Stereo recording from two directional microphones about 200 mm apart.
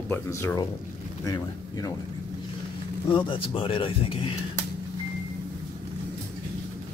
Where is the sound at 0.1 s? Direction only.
10° left (ahead or behind).